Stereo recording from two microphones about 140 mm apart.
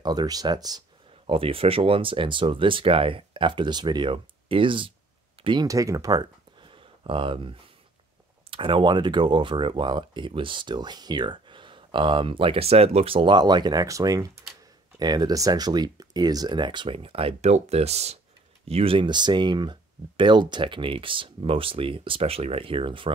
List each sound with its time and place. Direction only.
0.0 s speech: 30° right (ahead or behind)
5.7 s speech: 25° right (ahead or behind)